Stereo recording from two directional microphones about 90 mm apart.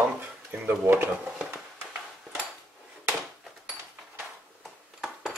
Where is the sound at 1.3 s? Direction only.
10° right (ahead or behind).